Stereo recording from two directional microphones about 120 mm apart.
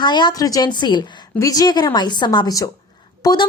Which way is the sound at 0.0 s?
40° left (ahead or behind).